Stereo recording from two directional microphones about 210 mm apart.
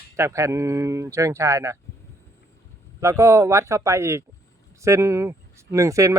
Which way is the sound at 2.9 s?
15° right (ahead or behind).